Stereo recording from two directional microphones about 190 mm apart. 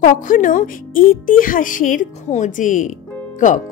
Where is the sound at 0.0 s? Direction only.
45° left (ahead or behind).